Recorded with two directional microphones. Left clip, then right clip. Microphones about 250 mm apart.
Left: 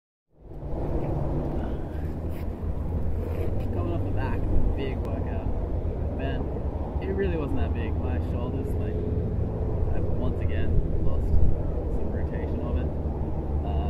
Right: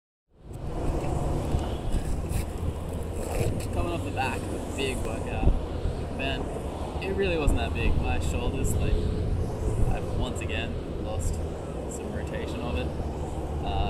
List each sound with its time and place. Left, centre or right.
7.2 s speech: centre